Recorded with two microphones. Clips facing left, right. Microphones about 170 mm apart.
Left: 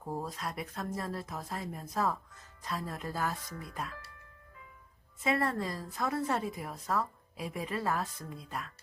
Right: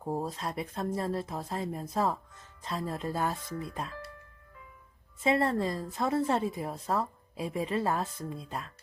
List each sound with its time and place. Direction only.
0.0 s a woman's voice: 30° right (ahead or behind)
5.2 s a woman's voice: 25° right (ahead or behind)